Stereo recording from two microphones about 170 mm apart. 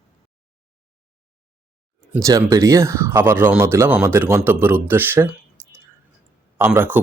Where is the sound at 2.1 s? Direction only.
20° right (ahead or behind).